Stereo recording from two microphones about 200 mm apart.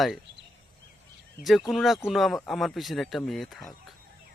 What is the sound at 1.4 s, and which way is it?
Speech, centre (ahead or behind).